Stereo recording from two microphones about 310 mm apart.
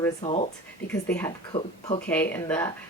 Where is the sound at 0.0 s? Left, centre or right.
Centre.